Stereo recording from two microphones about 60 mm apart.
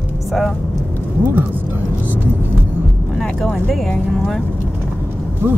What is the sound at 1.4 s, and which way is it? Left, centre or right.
Vehicle, right.